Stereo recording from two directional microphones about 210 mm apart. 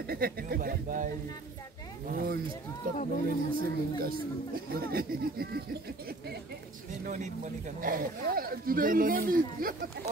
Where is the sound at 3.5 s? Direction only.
45° right (ahead or behind).